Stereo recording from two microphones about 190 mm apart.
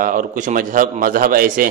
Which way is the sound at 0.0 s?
45° right (ahead or behind).